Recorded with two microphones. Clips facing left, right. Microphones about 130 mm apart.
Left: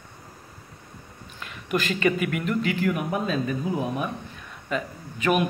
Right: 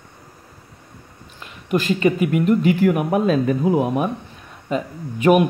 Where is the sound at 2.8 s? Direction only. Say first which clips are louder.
Right 8 dB; 65° right (ahead or behind).